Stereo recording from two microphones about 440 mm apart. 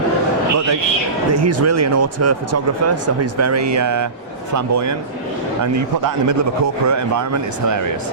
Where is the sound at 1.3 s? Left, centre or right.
Right.